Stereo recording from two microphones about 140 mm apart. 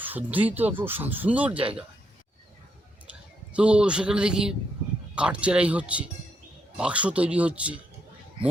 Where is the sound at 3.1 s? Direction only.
10° right (ahead or behind).